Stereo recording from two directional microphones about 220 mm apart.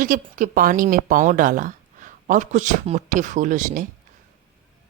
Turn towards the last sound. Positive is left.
turn(degrees=-35)  # may be behind; listen again after turning